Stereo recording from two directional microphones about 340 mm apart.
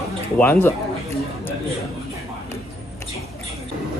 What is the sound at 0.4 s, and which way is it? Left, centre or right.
Speech, centre.